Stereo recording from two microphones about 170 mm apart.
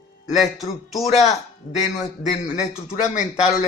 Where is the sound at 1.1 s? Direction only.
40° left (ahead or behind).